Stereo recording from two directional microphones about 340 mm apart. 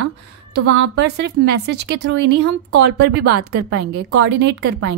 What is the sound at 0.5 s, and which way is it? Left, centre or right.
Speech, right.